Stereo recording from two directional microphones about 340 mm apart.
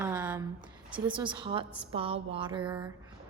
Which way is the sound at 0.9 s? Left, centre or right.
Centre.